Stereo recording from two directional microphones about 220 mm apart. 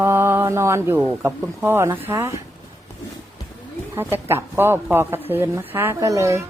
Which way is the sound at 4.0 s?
10° right (ahead or behind).